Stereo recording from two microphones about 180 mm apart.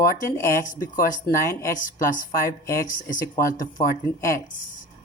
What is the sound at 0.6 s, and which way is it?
A woman's voice, 50° left (ahead or behind).